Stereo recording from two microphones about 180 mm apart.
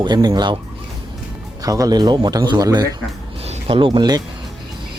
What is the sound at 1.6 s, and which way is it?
Speech, 20° right (ahead or behind).